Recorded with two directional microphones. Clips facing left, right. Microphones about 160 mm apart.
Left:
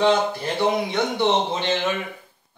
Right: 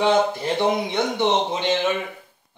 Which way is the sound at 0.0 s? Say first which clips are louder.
Right 1 dB; 20° right (ahead or behind).